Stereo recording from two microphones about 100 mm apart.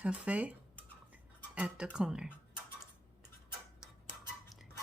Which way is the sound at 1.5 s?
10° right (ahead or behind).